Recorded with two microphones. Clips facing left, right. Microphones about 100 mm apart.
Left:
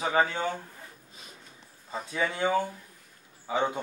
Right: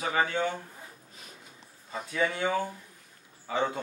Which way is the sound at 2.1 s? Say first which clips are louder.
Left 1 dB; 20° left (ahead or behind).